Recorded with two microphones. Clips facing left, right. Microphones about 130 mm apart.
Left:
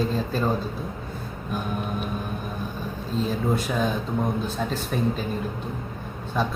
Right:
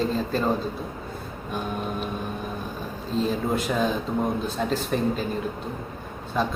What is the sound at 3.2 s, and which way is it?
A man's voice, centre (ahead or behind).